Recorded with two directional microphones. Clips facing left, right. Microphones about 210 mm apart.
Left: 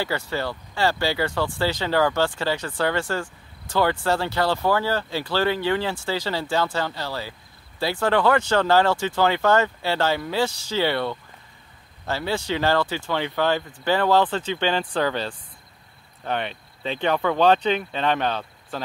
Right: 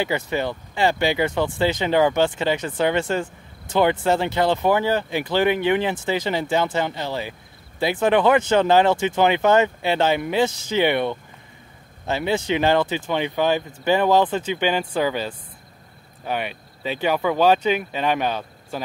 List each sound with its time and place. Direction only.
0.0 s speech: 20° right (ahead or behind)